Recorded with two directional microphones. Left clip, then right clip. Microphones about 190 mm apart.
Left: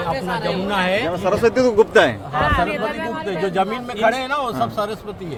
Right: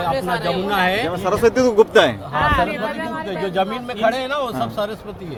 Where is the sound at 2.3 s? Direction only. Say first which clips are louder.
Right 1 dB; 45° right (ahead or behind).